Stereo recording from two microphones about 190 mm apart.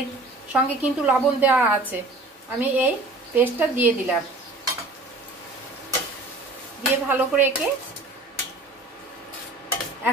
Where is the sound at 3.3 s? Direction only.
10° right (ahead or behind).